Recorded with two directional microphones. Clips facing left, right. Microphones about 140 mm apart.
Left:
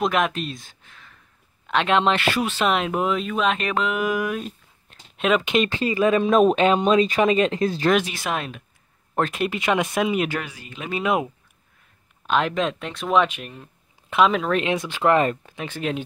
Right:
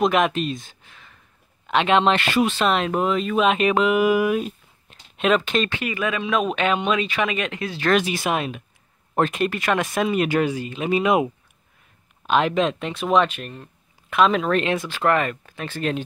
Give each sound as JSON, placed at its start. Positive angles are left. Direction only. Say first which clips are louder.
{"t": 0.0, "sound": "speech", "louder": "right 3 dB", "side_deg": 0}
{"t": 3.3, "sound": "speech", "louder": "right 8 dB", "side_deg": -10}
{"t": 5.4, "sound": "speech", "louder": "left 2 dB", "side_deg": 20}
{"t": 5.8, "sound": "speech", "louder": "left 6 dB", "side_deg": 30}
{"t": 6.1, "sound": "speech", "louder": "left 7 dB", "side_deg": 45}
{"t": 8.0, "sound": "speech", "louder": "right 4 dB", "side_deg": -10}
{"t": 9.5, "sound": "speech", "louder": "even", "side_deg": 20}
{"t": 9.9, "sound": "speech", "louder": "right 1 dB", "side_deg": 5}
{"t": 10.4, "sound": "speech", "louder": "right 12 dB", "side_deg": -30}
{"t": 10.9, "sound": "speech", "louder": "right 4 dB", "side_deg": -5}
{"t": 12.3, "sound": "speech", "louder": "right 2 dB", "side_deg": 0}
{"t": 13.1, "sound": "speech", "louder": "even", "side_deg": 10}
{"t": 14.9, "sound": "speech", "louder": "left 2 dB", "side_deg": 20}